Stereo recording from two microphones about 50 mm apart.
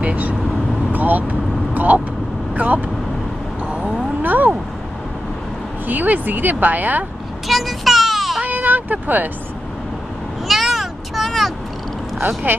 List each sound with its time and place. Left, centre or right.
0.0 s vehicle: right
2.5 s speech: right
3.6 s a sound: right
4.2 s speech: right
5.9 s speech: right
7.4 s a sound: centre
8.5 s speech: right
10.5 s vehicle: centre
12.5 s speech: right